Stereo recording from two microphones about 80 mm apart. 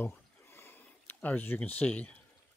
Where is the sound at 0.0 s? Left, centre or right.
Left.